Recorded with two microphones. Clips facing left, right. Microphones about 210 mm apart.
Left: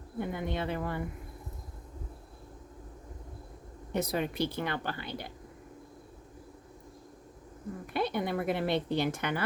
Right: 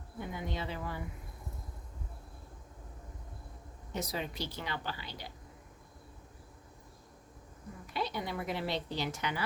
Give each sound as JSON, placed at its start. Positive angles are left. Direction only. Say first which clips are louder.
{"t": 0.2, "sound": "a woman's voice", "louder": "left 6 dB", "side_deg": 55}
{"t": 3.9, "sound": "a woman's voice", "louder": "left 7 dB", "side_deg": 55}
{"t": 7.9, "sound": "a woman's voice", "louder": "left 6 dB", "side_deg": 55}